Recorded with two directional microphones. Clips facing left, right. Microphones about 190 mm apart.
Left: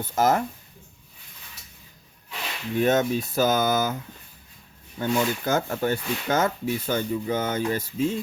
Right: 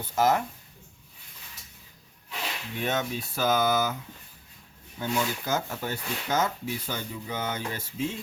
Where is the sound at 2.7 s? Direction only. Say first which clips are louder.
Left 9 dB; 45° left (ahead or behind).